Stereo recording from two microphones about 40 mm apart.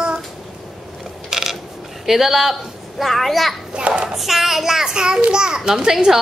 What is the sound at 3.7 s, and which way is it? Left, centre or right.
Speech, right.